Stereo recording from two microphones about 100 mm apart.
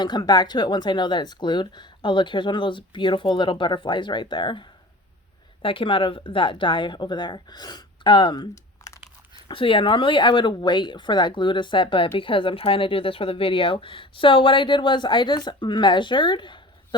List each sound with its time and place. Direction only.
0.0 s speech: 45° left (ahead or behind)
5.6 s speech: 60° left (ahead or behind)
8.8 s crumpling: 30° left (ahead or behind)
9.5 s speech: 60° left (ahead or behind)